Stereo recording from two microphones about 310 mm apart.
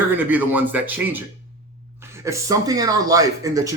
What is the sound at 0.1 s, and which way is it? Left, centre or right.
A man's voice, centre.